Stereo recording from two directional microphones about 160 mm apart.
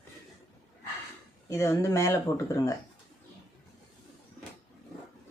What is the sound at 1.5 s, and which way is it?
Speech, 15° left (ahead or behind).